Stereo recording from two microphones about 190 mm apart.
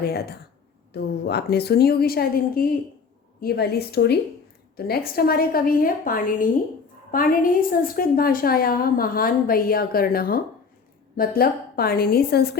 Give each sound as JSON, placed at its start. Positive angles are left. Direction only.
{"t": 0.0, "sound": "a woman's voice", "side_deg": 55}